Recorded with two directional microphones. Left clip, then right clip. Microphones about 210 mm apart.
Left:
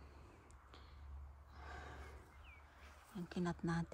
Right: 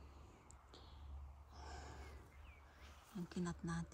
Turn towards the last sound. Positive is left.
turn(degrees=0)  # may be behind; listen again after turning